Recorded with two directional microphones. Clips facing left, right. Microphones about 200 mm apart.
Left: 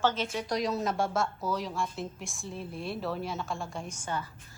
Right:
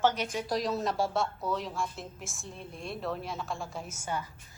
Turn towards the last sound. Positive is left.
turn(degrees=-10)  # may be behind; listen again after turning